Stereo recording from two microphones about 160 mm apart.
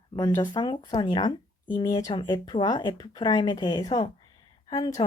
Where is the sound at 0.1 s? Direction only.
25° left (ahead or behind).